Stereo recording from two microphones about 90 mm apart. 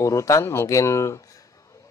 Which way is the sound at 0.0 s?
35° left (ahead or behind).